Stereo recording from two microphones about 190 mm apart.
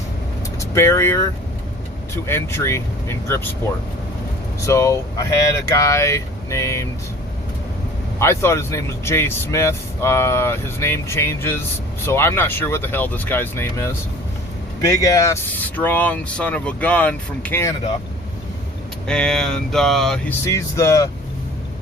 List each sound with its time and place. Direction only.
0.6 s speech: 15° left (ahead or behind)
8.2 s speech: 15° left (ahead or behind)
19.0 s speech: 5° left (ahead or behind)
20.4 s speech: 15° left (ahead or behind)